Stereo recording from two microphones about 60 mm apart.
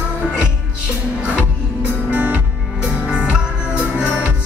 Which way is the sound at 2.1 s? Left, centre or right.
Right.